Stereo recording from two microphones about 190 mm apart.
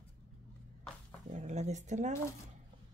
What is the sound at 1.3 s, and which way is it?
Speech, 40° right (ahead or behind).